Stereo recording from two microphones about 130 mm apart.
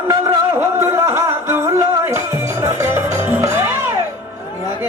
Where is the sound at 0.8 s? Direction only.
20° right (ahead or behind).